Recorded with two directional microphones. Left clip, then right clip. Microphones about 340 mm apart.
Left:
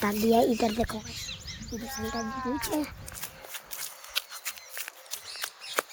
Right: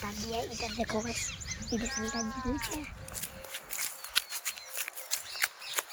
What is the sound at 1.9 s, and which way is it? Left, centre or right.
Speech, centre.